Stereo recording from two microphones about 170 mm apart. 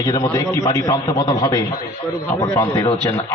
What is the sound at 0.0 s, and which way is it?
A man's voice, 20° left (ahead or behind).